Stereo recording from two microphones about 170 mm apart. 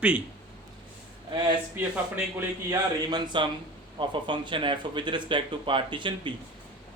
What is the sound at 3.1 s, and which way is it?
Speech, 25° right (ahead or behind).